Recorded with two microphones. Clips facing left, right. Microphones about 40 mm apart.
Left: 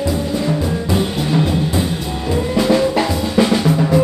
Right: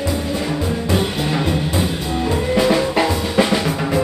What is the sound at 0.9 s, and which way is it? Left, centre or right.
Music, centre.